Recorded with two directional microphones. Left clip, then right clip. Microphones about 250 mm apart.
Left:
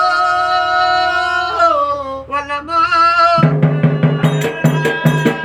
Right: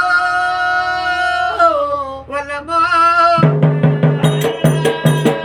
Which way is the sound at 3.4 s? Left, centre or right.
Centre.